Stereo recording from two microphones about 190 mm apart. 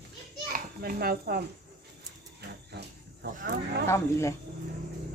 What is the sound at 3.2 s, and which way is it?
Speech, 55° right (ahead or behind).